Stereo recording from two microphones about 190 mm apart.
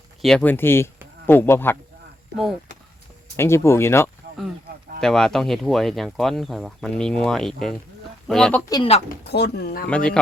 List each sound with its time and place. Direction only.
0.2 s speech: 5° left (ahead or behind)
3.3 s speech: 15° left (ahead or behind)
4.9 s speech: 5° left (ahead or behind)
8.7 s speech: 25° left (ahead or behind)
9.2 s speech: 60° left (ahead or behind)
9.9 s speech: 5° left (ahead or behind)